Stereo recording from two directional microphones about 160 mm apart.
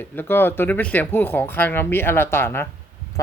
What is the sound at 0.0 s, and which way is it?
Speech, 15° left (ahead or behind).